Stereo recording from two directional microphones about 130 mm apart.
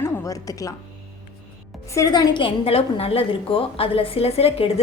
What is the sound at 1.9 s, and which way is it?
A woman's voice, 25° left (ahead or behind).